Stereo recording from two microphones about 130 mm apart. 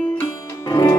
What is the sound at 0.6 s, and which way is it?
Music, 30° left (ahead or behind).